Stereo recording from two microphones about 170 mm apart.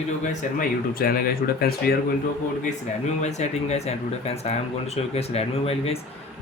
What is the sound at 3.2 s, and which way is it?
Speech, 40° left (ahead or behind).